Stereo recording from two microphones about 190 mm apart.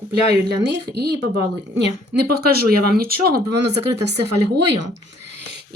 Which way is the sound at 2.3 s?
55° right (ahead or behind).